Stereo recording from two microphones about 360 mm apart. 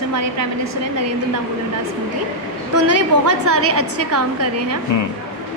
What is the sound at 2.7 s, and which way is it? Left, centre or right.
A woman's voice, right.